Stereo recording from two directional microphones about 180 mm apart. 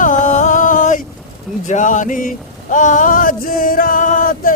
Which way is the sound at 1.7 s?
45° left (ahead or behind).